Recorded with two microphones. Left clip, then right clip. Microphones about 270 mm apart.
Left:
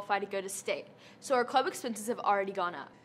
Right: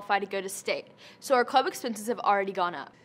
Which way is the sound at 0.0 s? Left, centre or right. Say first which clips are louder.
Right 4 dB; right.